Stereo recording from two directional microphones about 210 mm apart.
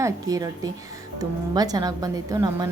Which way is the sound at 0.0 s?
15° right (ahead or behind).